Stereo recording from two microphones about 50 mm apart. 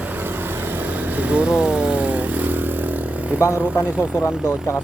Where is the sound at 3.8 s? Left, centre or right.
Right.